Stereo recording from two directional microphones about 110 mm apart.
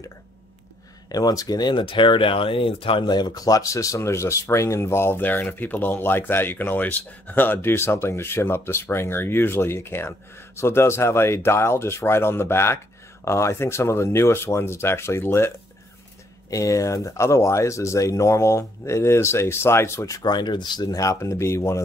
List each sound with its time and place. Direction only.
1.0 s speech: 35° left (ahead or behind)